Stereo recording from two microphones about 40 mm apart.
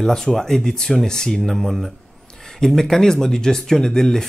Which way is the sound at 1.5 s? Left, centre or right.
Centre.